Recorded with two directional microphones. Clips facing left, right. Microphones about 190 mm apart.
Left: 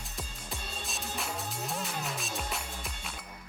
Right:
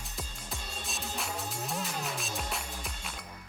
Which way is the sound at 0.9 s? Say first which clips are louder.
Even; centre (ahead or behind).